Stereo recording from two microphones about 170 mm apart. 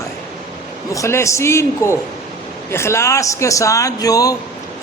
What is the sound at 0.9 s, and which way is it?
A man's voice, 15° left (ahead or behind).